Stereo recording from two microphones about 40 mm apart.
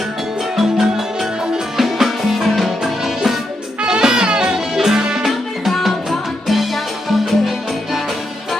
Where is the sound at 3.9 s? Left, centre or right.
Centre.